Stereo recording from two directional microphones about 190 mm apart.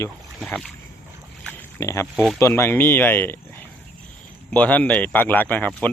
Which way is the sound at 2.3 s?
15° left (ahead or behind).